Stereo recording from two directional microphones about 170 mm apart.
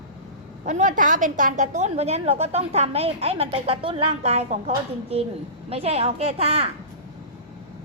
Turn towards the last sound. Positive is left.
turn(degrees=-35)  # may be behind; listen again after turning